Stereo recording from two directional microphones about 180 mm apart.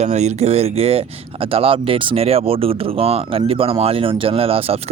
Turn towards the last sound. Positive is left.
turn(degrees=-35)  # may be behind; listen again after turning